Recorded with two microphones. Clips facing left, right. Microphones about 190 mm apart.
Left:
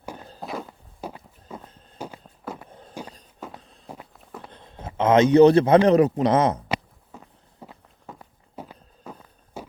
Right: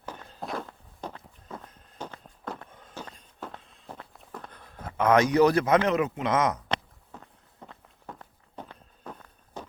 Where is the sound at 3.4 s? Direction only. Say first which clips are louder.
Left 1 dB; 5° left (ahead or behind).